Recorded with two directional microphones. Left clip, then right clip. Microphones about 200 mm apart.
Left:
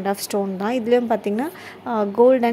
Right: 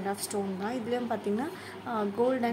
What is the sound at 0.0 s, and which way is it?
A woman's voice, 40° left (ahead or behind).